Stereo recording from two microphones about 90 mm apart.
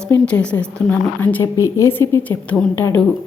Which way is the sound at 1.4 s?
35° left (ahead or behind).